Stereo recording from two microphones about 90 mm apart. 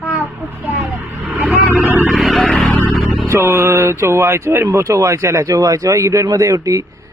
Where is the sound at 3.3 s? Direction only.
30° right (ahead or behind).